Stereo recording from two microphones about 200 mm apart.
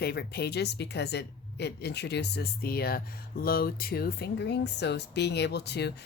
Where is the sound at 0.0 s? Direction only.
55° left (ahead or behind).